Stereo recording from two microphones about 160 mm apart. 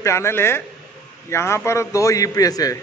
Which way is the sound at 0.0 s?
15° left (ahead or behind).